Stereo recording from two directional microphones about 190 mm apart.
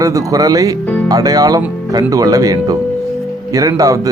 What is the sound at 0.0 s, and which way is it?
Speech, 15° right (ahead or behind).